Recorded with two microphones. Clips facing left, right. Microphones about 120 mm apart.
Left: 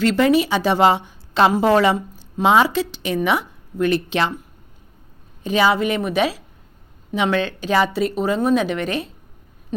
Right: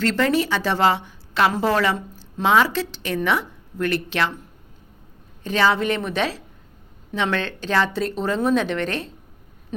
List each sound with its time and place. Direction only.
0.0 s a woman's voice: 15° left (ahead or behind)
5.4 s a woman's voice: 10° left (ahead or behind)